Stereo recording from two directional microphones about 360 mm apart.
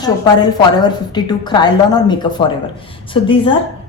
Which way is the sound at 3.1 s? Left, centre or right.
Centre.